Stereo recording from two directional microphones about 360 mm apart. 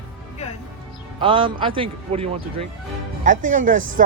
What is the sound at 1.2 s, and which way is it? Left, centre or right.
Speech, centre.